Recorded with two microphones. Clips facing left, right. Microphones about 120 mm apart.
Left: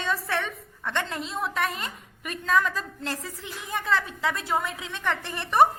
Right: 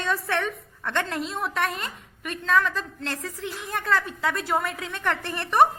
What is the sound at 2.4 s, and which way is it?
Speech, 10° left (ahead or behind).